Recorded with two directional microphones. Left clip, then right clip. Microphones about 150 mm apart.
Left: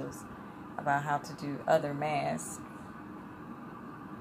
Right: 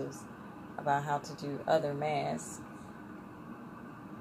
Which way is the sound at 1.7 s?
15° left (ahead or behind).